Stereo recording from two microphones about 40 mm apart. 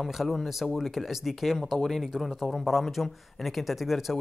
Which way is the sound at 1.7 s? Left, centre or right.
Centre.